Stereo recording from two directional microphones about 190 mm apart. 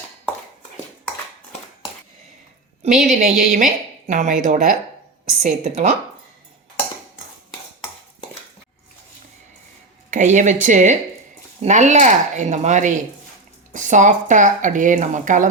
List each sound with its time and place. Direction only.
2.8 s a woman's voice: 40° right (ahead or behind)
10.1 s speech: 40° right (ahead or behind)